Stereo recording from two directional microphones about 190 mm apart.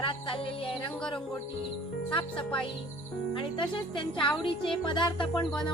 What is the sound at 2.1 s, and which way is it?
Speech, 25° left (ahead or behind).